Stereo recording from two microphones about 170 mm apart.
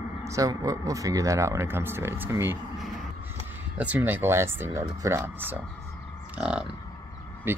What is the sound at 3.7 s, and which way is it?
Speech, 10° right (ahead or behind).